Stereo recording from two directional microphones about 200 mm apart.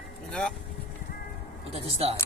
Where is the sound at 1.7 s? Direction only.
30° right (ahead or behind).